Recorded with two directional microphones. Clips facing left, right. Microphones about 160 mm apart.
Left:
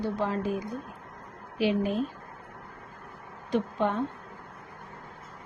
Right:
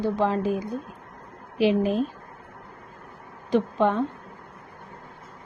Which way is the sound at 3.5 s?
90° right.